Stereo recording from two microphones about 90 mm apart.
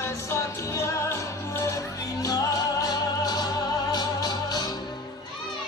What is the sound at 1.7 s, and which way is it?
Music, 40° left (ahead or behind).